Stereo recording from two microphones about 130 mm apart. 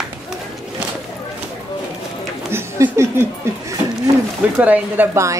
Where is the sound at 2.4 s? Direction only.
20° right (ahead or behind).